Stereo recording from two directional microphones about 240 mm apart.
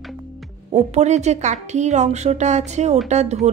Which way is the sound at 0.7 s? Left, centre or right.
Right.